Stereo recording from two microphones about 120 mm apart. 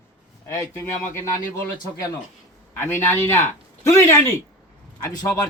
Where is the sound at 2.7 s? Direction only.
20° left (ahead or behind).